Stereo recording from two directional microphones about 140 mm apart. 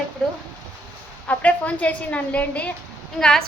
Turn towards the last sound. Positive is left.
turn(degrees=5)  # may be behind; listen again after turning